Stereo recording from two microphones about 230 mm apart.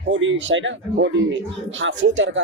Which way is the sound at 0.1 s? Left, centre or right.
Right.